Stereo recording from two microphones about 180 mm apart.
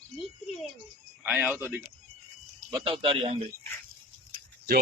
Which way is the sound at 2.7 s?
25° right (ahead or behind).